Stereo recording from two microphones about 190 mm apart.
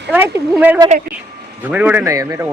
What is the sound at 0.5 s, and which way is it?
Speech, 10° right (ahead or behind).